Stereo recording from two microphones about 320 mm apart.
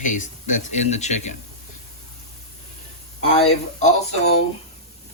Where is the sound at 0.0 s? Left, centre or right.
Left.